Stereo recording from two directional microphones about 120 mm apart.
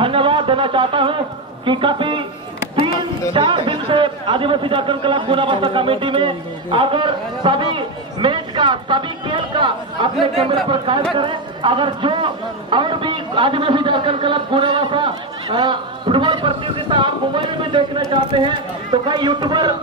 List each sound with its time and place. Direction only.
0.0 s a sound: 45° right (ahead or behind)
1.7 s a man's voice: 45° right (ahead or behind)
3.3 s a man's voice: 45° right (ahead or behind)